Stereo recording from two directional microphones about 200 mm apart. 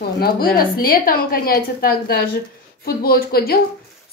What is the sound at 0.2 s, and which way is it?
A woman's voice, 45° left (ahead or behind).